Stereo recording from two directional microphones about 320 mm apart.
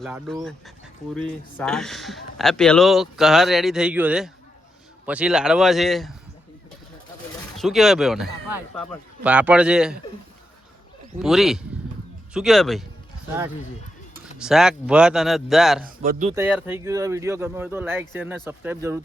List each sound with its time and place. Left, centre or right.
0.0 s a man's voice: centre
7.5 s a man's voice: centre
11.2 s a man's voice: centre
14.3 s a man's voice: centre
15.8 s speech: right
16.3 s speech: centre